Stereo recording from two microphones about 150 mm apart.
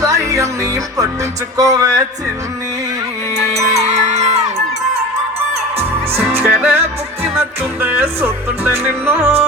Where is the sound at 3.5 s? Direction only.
45° right (ahead or behind).